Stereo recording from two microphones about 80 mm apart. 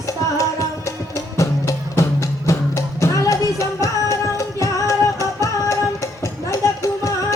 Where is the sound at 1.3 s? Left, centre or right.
Left.